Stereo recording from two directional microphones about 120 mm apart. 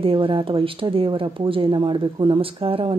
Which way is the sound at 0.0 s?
50° right (ahead or behind).